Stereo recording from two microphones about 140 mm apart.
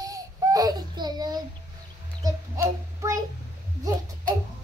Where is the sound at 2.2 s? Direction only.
25° right (ahead or behind).